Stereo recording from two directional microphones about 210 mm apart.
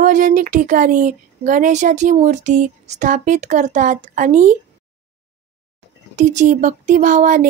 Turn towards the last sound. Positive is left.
turn(degrees=-35)  # may be behind; listen again after turning